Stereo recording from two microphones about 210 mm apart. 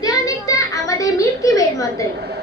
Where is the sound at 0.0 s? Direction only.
20° left (ahead or behind).